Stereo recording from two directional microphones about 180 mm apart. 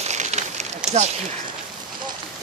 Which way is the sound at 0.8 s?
40° right (ahead or behind).